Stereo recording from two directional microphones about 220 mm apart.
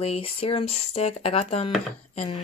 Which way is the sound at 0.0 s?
25° left (ahead or behind).